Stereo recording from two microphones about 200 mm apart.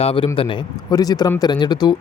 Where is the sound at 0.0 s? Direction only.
30° left (ahead or behind).